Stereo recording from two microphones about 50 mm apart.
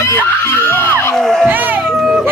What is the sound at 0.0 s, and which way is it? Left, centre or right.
Screaming, left.